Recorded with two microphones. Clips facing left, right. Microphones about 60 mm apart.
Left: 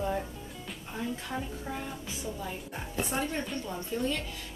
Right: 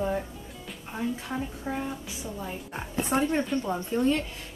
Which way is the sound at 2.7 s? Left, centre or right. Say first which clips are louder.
Right 6 dB; right.